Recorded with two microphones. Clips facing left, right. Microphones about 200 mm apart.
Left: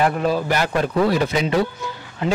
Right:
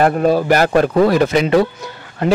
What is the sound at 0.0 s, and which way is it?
A man's voice, 45° right (ahead or behind).